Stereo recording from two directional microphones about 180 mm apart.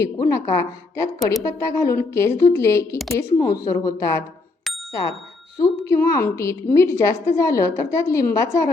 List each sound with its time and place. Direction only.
0.0 s a woman's voice: 15° left (ahead or behind)
5.5 s a woman's voice: 15° left (ahead or behind)